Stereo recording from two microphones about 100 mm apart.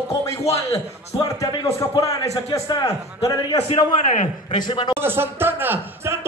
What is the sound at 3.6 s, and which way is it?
A man's voice, 70° left (ahead or behind).